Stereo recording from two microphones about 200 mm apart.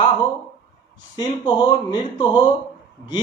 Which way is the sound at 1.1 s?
20° left (ahead or behind).